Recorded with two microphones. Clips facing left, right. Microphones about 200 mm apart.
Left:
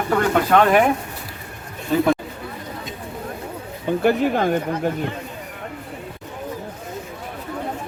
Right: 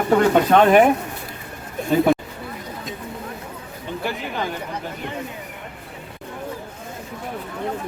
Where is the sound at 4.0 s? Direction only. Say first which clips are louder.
Left 9 dB; 55° left (ahead or behind).